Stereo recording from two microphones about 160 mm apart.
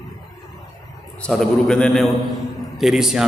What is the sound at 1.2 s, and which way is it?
A man's voice, 5° left (ahead or behind).